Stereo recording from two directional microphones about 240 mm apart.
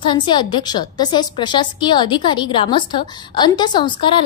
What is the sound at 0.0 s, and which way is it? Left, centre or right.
A woman's voice, centre.